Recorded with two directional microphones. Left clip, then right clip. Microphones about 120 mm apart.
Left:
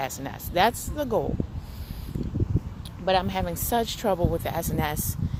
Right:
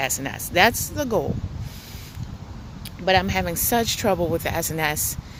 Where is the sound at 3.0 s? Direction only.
25° right (ahead or behind).